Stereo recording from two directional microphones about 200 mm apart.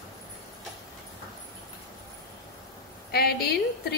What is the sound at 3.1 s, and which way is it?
Speech, 50° left (ahead or behind).